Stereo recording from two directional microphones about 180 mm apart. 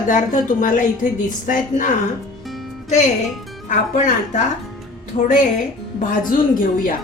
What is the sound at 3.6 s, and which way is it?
Speech, 45° left (ahead or behind).